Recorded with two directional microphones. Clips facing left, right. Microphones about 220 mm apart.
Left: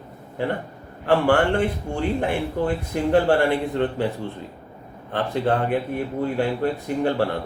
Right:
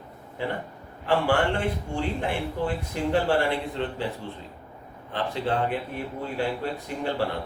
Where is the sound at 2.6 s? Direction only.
55° left (ahead or behind).